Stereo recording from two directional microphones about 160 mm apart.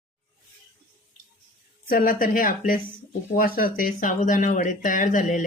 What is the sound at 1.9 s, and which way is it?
Speech, 60° left (ahead or behind).